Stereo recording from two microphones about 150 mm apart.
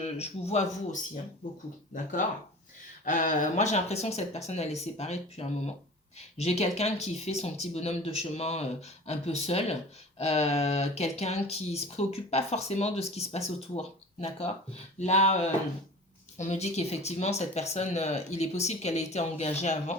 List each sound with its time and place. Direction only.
0.0 s speech: 45° left (ahead or behind)
3.0 s speech: 60° left (ahead or behind)